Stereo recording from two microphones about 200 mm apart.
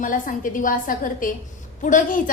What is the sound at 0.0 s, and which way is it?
A woman's voice, 40° left (ahead or behind).